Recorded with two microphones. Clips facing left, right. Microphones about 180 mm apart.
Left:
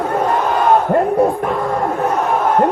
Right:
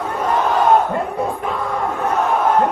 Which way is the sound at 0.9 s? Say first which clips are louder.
Left 8 dB; 60° left (ahead or behind).